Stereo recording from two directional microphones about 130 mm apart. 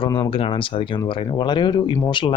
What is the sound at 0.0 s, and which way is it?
Speech, 40° left (ahead or behind).